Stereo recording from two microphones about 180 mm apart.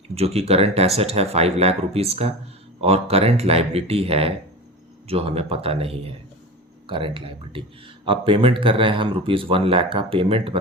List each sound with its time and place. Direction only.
0.1 s speech: 35° right (ahead or behind)